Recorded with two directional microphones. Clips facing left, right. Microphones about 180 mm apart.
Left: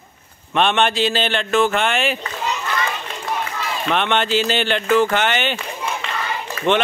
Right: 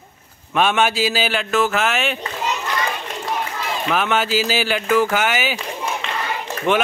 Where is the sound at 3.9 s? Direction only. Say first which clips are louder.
Left 1 dB; 5° right (ahead or behind).